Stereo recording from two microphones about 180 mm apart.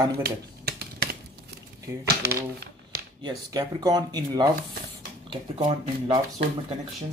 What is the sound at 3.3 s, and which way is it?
Speech, 20° right (ahead or behind).